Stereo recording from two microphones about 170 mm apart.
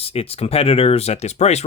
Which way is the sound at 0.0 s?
35° left (ahead or behind).